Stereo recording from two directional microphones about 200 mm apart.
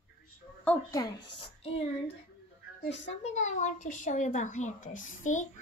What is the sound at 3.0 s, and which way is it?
Speech, 35° left (ahead or behind).